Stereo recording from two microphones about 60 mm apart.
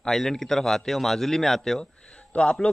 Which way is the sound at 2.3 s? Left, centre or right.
Centre.